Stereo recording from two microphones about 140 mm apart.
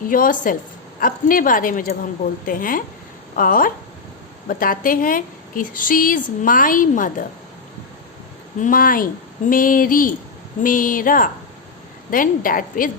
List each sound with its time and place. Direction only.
0.1 s a woman's voice: 75° left (ahead or behind)
8.6 s a woman's voice: 90° left